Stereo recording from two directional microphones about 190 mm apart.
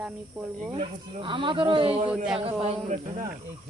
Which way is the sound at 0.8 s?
25° right (ahead or behind).